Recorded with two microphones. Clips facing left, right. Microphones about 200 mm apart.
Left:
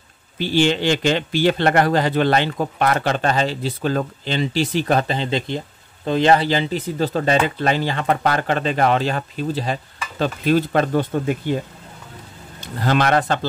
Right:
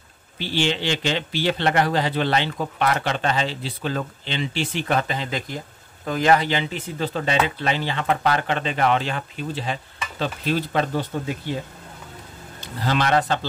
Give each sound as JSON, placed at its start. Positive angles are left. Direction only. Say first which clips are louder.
{"t": 0.4, "sound": "speech", "louder": "left 6 dB", "side_deg": 45}
{"t": 12.5, "sound": "a man's voice", "louder": "left 4 dB", "side_deg": 50}